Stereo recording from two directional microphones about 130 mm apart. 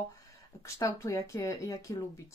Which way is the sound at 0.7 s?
25° left (ahead or behind).